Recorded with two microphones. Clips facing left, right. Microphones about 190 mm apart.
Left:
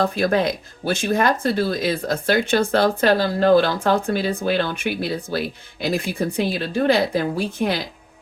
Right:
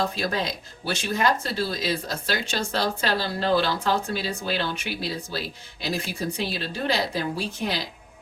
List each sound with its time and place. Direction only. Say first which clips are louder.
0.0 s speech: left 7 dB; 55° left (ahead or behind)